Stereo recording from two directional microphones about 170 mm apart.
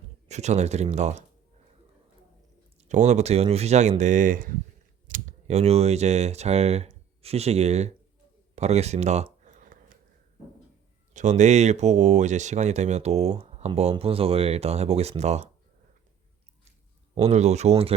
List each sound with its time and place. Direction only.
0.3 s speech: 40° right (ahead or behind)
2.9 s speech: 45° right (ahead or behind)
8.5 s a sound: 40° right (ahead or behind)
11.1 s speech: 45° right (ahead or behind)
17.2 s speech: 40° right (ahead or behind)